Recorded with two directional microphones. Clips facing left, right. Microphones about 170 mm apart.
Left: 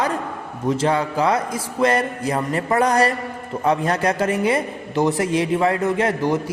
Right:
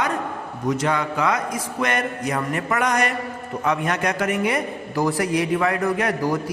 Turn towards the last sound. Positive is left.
turn(degrees=25)  # may be behind; listen again after turning